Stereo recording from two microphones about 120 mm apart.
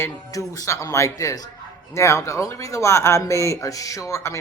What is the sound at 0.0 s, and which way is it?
Speech, 25° left (ahead or behind).